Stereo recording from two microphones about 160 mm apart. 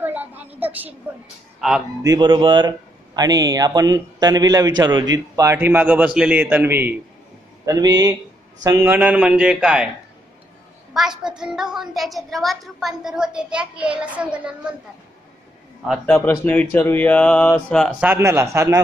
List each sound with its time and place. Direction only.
0.0 s a sound: 10° right (ahead or behind)
0.6 s a woman's voice: 10° right (ahead or behind)
1.6 s a woman's voice: centre (ahead or behind)
2.0 s a man's voice: 30° right (ahead or behind); by 9.8 s 5° right (ahead or behind)
10.9 s a woman's voice: 5° right (ahead or behind)
15.8 s a woman's voice: centre (ahead or behind)
16.2 s speech: 10° left (ahead or behind)
18.0 s a man's voice: 15° right (ahead or behind)